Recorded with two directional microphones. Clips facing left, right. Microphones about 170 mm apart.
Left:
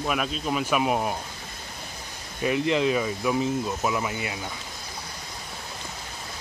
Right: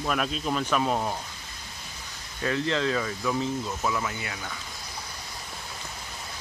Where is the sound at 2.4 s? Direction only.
15° left (ahead or behind).